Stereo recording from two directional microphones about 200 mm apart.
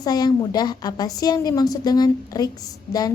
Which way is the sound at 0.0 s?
20° left (ahead or behind).